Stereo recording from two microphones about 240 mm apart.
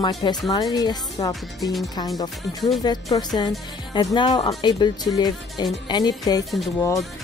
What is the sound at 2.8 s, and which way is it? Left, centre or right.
Speech, centre.